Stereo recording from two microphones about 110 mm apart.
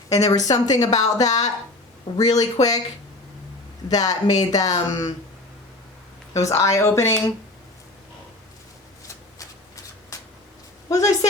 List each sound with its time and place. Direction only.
0.1 s speech: 35° left (ahead or behind)
3.8 s speech: 35° left (ahead or behind)
6.3 s speech: 30° left (ahead or behind)
10.8 s a woman's voice: 30° left (ahead or behind)